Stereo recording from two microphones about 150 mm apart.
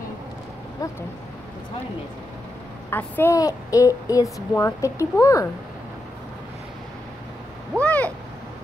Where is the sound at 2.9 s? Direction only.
15° left (ahead or behind).